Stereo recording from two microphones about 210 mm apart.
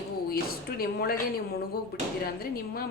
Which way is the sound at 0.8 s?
45° left (ahead or behind).